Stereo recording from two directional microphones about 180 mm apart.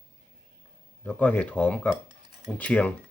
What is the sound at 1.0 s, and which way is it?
Speech, 10° left (ahead or behind).